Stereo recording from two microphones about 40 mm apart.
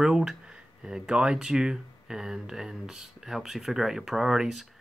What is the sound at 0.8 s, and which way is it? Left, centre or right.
Speech, centre.